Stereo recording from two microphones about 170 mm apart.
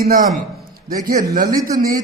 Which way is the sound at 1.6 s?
60° right (ahead or behind).